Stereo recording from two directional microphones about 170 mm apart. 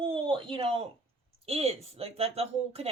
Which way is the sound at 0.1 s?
30° right (ahead or behind).